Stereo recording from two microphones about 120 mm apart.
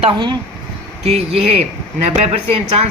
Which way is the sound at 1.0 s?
60° right (ahead or behind).